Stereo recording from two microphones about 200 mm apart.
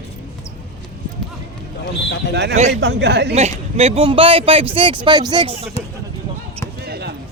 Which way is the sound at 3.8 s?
30° right (ahead or behind).